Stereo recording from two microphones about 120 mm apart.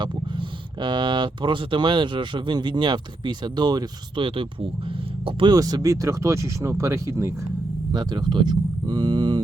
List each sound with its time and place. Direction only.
0.0 s speech: 40° right (ahead or behind)
5.5 s speech: 30° right (ahead or behind)
7.9 s speech: 40° right (ahead or behind)